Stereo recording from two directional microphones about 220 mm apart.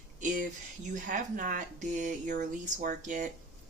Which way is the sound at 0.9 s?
35° right (ahead or behind).